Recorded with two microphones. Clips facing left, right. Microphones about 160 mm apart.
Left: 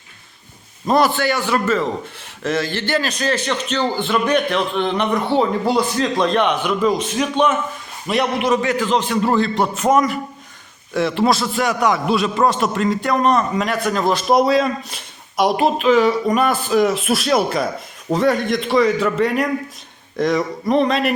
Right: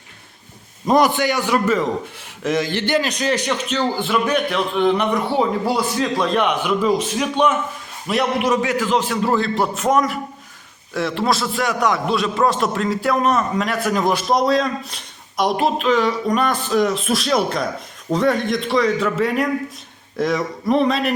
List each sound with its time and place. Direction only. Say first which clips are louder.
0.9 s a man's voice: even; 15° right (ahead or behind); by 13.9 s centre (ahead or behind)
13.9 s a man's voice: right 2 dB; 10° right (ahead or behind)
14.3 s speech: left 5 dB; 5° left (ahead or behind)